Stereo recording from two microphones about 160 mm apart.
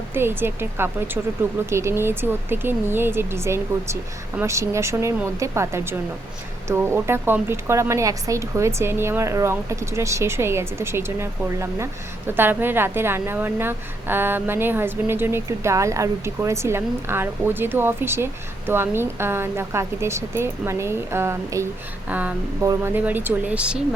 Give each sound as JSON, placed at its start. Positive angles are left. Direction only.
{"t": 0.1, "sound": "a woman's voice", "side_deg": -15}